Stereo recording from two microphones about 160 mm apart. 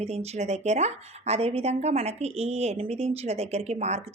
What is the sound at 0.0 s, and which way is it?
A woman's voice, 40° right (ahead or behind).